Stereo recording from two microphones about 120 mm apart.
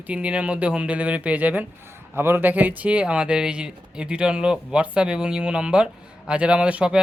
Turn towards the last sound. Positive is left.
turn(degrees=-10)  # may be behind; listen again after turning